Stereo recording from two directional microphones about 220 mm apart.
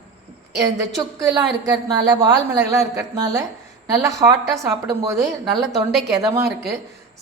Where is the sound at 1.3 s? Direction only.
20° right (ahead or behind).